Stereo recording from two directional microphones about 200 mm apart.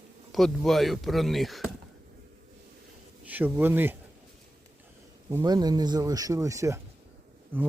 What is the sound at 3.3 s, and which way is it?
Speech, 10° right (ahead or behind).